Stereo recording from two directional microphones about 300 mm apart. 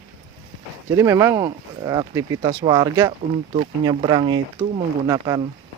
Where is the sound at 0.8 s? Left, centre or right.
Centre.